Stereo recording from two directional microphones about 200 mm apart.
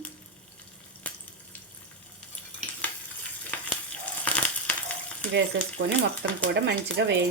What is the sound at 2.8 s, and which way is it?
Frying, 5° left (ahead or behind).